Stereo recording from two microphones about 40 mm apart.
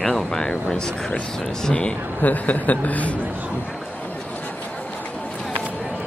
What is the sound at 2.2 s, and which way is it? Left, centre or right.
Speech, left.